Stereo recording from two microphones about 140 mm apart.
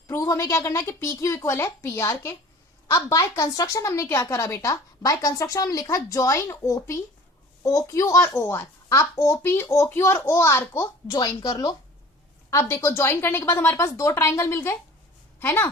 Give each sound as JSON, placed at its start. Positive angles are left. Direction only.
{"t": 0.1, "sound": "a woman's voice", "side_deg": 20}